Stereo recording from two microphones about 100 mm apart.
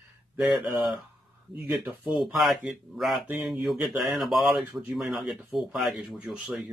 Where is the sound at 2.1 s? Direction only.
5° right (ahead or behind).